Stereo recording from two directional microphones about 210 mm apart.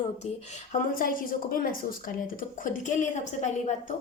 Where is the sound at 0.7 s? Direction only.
40° left (ahead or behind).